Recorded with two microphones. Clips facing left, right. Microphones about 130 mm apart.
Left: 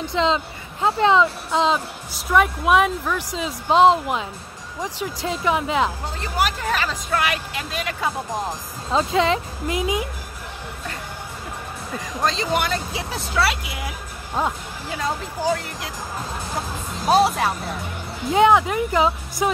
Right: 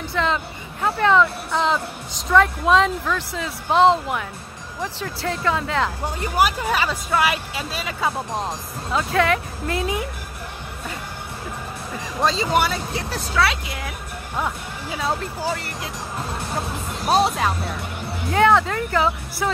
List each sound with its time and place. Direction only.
0.1 s speech: 20° left (ahead or behind)
6.2 s speech: 10° right (ahead or behind)
8.9 s speech: 20° left (ahead or behind)
12.2 s speech: 5° right (ahead or behind)
14.9 s speech: 5° right (ahead or behind)
17.1 s speech: 5° left (ahead or behind)
18.3 s speech: 15° left (ahead or behind)